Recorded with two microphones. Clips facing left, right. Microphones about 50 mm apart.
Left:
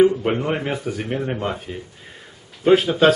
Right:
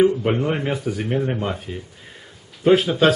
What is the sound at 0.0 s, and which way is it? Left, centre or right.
Speech, centre.